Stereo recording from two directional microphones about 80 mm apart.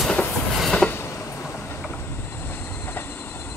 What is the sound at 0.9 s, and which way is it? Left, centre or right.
Train, left.